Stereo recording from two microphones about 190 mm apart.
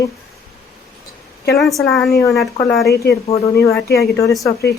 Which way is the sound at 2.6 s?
20° left (ahead or behind).